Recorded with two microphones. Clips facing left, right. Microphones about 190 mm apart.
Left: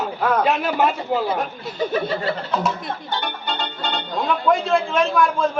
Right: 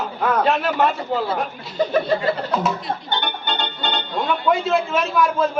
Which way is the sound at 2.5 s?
Centre (ahead or behind).